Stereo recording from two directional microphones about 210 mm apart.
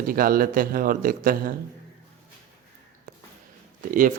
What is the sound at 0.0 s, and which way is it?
A man's voice, 45° right (ahead or behind).